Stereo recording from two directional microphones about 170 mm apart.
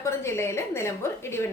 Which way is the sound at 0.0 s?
15° left (ahead or behind).